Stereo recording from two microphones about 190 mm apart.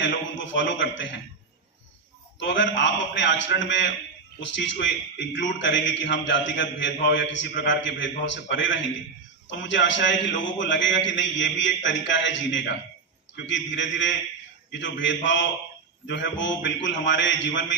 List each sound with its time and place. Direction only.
0.0 s a man's voice: 75° left (ahead or behind)
2.4 s a man's voice: 70° left (ahead or behind)